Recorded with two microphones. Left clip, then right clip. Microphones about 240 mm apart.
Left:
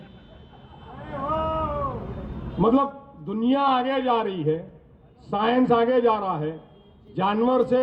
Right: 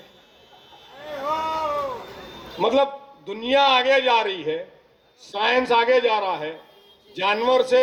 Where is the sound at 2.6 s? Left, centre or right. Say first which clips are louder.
Right 2 dB; left.